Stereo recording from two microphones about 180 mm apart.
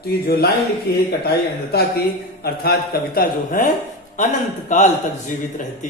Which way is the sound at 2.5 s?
60° left (ahead or behind).